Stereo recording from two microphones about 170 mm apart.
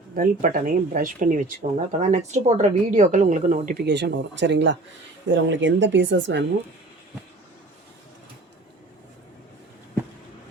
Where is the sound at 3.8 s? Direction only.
90° right.